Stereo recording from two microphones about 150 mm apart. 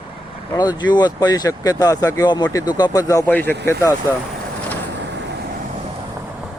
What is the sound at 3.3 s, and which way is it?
Speech, 10° left (ahead or behind).